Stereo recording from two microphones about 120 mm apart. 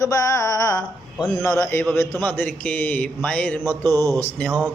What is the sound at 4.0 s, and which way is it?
Speech, 30° right (ahead or behind).